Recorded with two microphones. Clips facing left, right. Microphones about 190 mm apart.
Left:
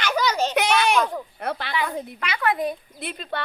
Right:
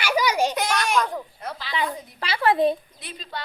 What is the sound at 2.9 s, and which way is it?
Speech, 55° left (ahead or behind).